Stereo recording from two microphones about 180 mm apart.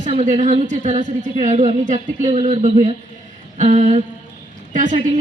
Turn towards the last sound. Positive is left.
turn(degrees=-45)  # may be behind; listen again after turning